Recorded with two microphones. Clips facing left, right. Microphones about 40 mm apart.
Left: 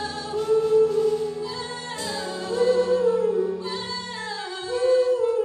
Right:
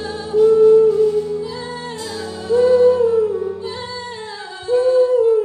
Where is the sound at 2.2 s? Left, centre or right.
Centre.